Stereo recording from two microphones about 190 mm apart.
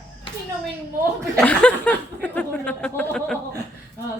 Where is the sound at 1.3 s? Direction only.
5° left (ahead or behind).